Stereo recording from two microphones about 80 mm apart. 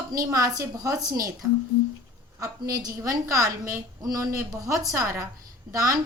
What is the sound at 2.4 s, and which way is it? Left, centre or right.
A woman's voice, right.